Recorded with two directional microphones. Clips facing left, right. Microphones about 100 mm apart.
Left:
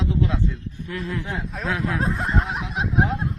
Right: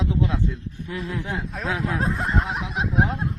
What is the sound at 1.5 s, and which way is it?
Speech, centre (ahead or behind).